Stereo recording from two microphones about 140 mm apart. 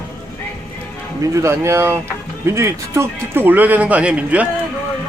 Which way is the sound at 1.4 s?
20° right (ahead or behind).